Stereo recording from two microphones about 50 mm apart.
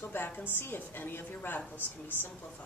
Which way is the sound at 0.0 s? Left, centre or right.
Left.